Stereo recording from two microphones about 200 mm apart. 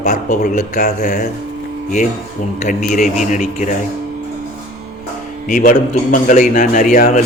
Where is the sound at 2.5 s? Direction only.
35° left (ahead or behind).